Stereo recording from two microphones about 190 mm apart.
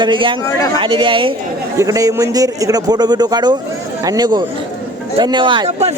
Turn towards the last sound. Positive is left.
turn(degrees=-25)  # may be behind; listen again after turning